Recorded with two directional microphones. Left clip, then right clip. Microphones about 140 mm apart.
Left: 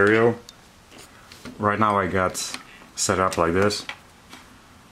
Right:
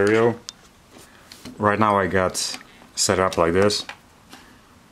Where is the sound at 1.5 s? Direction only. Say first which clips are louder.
Right 2 dB; 30° right (ahead or behind).